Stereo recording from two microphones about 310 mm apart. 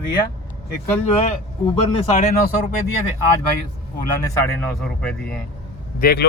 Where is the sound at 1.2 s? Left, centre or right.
Centre.